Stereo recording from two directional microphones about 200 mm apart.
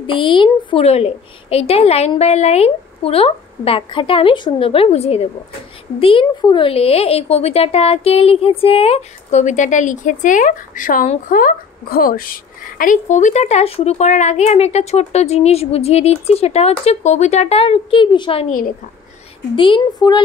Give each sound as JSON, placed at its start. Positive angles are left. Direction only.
{"t": 0.0, "sound": "a woman's voice", "side_deg": 25}
{"t": 19.5, "sound": "a woman's voice", "side_deg": 25}